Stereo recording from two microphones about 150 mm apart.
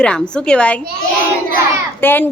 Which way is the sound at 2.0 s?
15° left (ahead or behind).